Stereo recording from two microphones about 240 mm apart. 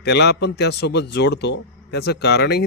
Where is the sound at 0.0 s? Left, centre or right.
Left.